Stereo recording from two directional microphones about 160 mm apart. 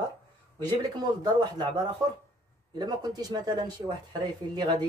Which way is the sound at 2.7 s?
25° right (ahead or behind).